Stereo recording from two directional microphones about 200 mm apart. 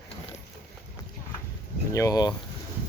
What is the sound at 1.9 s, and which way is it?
Speech, 15° left (ahead or behind).